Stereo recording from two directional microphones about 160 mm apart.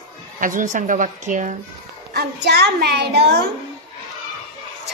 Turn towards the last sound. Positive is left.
turn(degrees=-90)